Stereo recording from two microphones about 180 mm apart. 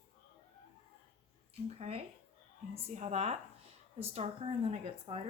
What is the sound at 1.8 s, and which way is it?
A woman's voice, 35° right (ahead or behind).